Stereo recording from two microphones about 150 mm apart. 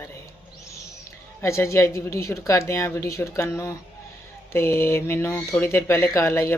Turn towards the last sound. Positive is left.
turn(degrees=20)  # may be behind; listen again after turning